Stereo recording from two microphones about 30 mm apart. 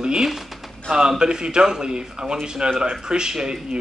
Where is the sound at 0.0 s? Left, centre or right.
Right.